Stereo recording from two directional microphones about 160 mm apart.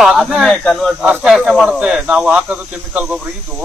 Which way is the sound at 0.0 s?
Centre (ahead or behind).